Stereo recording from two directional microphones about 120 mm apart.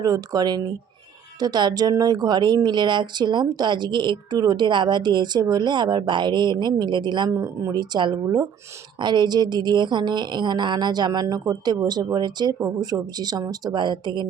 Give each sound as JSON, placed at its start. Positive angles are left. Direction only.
{"t": 0.0, "sound": "a woman's voice", "side_deg": -35}
{"t": 7.3, "sound": "a woman's voice", "side_deg": -25}